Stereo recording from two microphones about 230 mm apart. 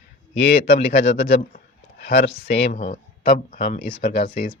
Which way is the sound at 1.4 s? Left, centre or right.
Left.